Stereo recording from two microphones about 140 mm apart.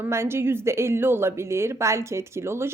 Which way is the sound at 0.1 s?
20° right (ahead or behind).